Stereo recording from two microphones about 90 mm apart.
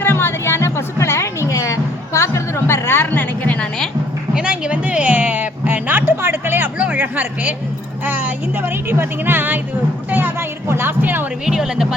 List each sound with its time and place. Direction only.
0.0 s music: 25° left (ahead or behind)
4.4 s music: 10° right (ahead or behind)
8.0 s speech: 20° right (ahead or behind)
11.4 s speech: 5° right (ahead or behind)